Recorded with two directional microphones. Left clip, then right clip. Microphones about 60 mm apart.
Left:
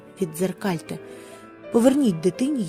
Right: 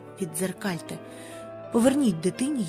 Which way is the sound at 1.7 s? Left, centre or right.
Centre.